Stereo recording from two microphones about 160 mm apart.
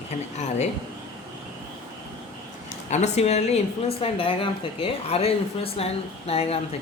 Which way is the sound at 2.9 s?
45° left (ahead or behind).